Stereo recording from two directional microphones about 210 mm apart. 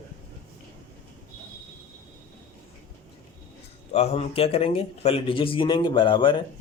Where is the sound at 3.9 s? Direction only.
30° left (ahead or behind).